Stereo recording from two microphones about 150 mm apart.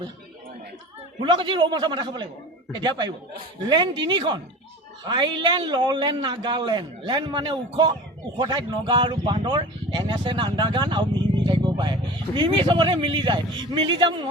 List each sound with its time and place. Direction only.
1.2 s a man's voice: 35° right (ahead or behind)